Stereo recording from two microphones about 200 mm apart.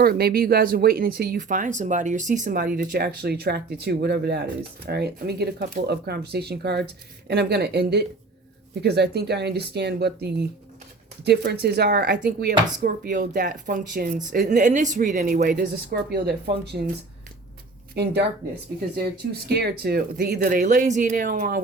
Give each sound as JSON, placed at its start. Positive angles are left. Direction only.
{"t": 0.0, "sound": "speech", "side_deg": -50}
{"t": 2.7, "sound": "speech", "side_deg": -50}
{"t": 17.9, "sound": "speech", "side_deg": -55}
{"t": 19.5, "sound": "speech", "side_deg": -55}